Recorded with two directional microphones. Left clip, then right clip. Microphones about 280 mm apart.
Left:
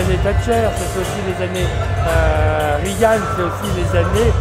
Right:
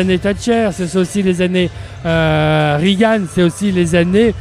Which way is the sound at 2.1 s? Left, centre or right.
Right.